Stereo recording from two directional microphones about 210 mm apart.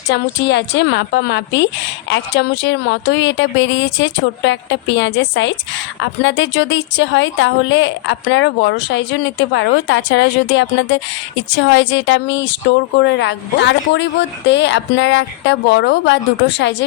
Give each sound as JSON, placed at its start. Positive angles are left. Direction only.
{"t": 0.1, "sound": "a woman's voice", "side_deg": 55}